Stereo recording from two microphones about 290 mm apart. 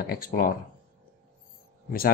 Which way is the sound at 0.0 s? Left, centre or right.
Left.